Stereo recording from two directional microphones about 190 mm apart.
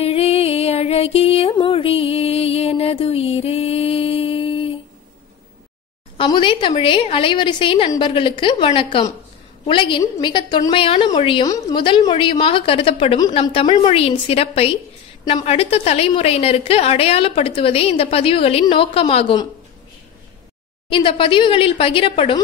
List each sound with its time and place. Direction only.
0.0 s music: 30° left (ahead or behind)
6.1 s a woman's voice: 25° left (ahead or behind)
20.9 s a woman's voice: 25° left (ahead or behind)